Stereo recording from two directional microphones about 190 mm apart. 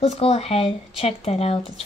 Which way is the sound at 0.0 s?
30° left (ahead or behind).